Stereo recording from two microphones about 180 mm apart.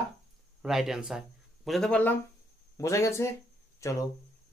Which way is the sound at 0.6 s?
Centre (ahead or behind).